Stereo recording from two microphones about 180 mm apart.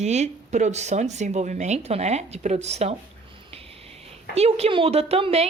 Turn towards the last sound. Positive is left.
turn(degrees=-35)  # may be behind; listen again after turning